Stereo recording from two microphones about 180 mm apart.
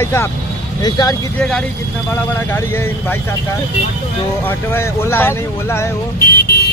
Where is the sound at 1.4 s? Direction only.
5° left (ahead or behind).